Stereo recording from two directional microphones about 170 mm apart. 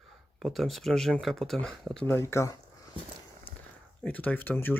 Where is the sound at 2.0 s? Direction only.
15° left (ahead or behind).